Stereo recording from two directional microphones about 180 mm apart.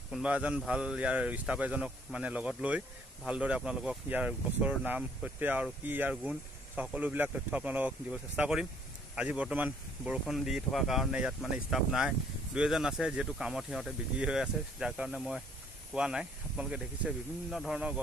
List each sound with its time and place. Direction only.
0.1 s speech: 5° right (ahead or behind)